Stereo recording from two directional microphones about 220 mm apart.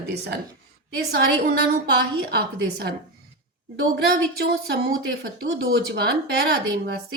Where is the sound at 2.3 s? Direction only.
45° right (ahead or behind).